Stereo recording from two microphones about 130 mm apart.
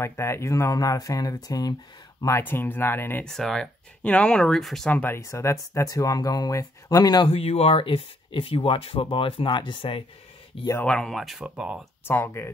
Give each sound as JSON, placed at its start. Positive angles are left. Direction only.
{"t": 0.0, "sound": "speech", "side_deg": 20}
{"t": 2.2, "sound": "speech", "side_deg": 20}
{"t": 3.3, "sound": "speech", "side_deg": 5}
{"t": 4.9, "sound": "speech", "side_deg": 15}
{"t": 7.2, "sound": "speech", "side_deg": 50}
{"t": 10.9, "sound": "speech", "side_deg": 5}
{"t": 12.1, "sound": "speech", "side_deg": 20}